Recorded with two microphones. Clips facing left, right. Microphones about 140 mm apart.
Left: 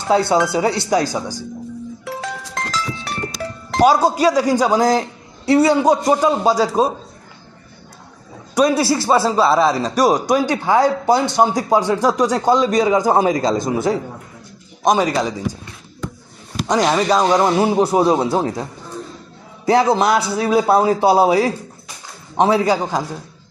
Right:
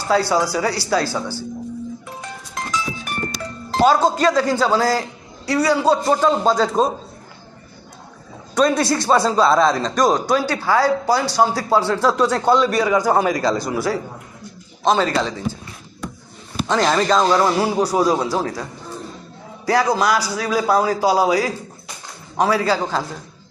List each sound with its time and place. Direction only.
0.1 s speech: 20° left (ahead or behind)
2.0 s music: 80° left
3.8 s a man's voice: 10° left (ahead or behind)
8.5 s a man's voice: 10° left (ahead or behind)
16.6 s a man's voice: 10° left (ahead or behind)